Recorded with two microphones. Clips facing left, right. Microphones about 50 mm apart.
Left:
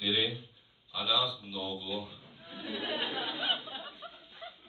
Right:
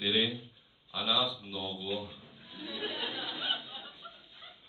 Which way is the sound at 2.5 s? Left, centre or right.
Left.